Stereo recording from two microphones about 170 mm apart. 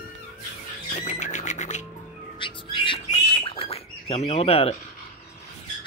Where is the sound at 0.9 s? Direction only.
45° left (ahead or behind).